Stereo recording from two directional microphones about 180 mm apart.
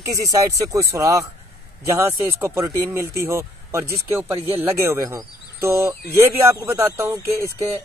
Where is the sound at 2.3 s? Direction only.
15° right (ahead or behind).